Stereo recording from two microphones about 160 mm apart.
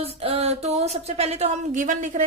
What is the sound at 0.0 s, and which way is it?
A woman's voice, 40° right (ahead or behind).